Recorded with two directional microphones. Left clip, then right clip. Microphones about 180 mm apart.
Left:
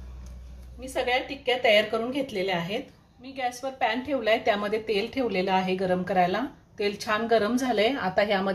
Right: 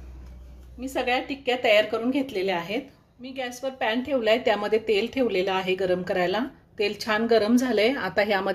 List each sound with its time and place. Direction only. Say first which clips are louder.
0.7 s a woman's voice: right 1 dB; 45° right (ahead or behind)